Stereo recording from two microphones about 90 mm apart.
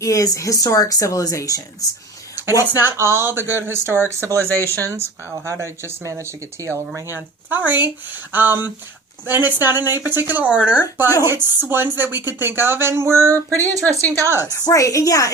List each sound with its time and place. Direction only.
0.0 s speech: 40° left (ahead or behind)
2.7 s a woman's voice: 25° right (ahead or behind)
14.4 s speech: 45° left (ahead or behind)